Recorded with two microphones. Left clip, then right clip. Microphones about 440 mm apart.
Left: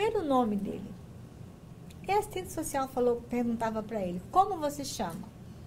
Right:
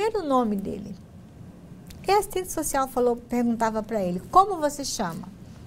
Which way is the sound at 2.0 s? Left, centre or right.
Right.